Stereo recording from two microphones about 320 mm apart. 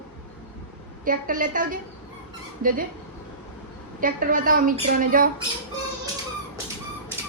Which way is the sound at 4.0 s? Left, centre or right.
Right.